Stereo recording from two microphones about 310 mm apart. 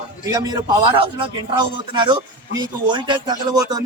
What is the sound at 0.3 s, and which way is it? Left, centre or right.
A man's voice, centre.